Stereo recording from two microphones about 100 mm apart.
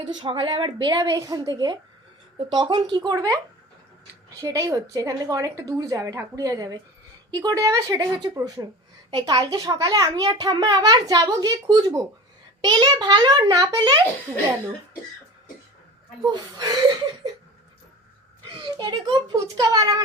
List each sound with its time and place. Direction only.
0.2 s a woman's voice: 60° right (ahead or behind)
0.9 s a child's voice: 35° right (ahead or behind)
4.4 s a child's voice: 35° right (ahead or behind)
9.0 s a child's voice: 45° right (ahead or behind)
16.2 s a child's voice: 40° right (ahead or behind)
18.5 s a child's voice: 50° right (ahead or behind)